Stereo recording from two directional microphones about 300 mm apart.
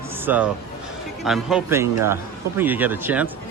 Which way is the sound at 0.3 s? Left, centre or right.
Centre.